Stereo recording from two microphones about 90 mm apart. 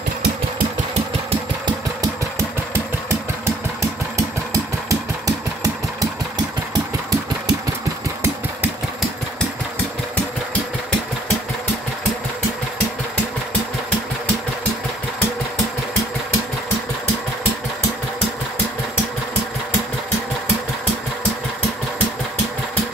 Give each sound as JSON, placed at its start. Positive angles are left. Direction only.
{"t": 2.3, "sound": "engine", "side_deg": -30}
{"t": 4.8, "sound": "engine", "side_deg": -40}